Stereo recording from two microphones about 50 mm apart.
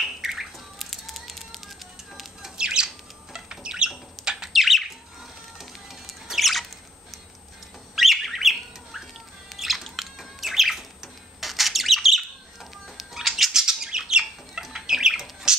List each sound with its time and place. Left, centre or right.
0.0 s bird: centre
2.1 s music: centre
3.3 s squawk: centre
4.2 s bird: centre
5.6 s music: centre
7.9 s bird: centre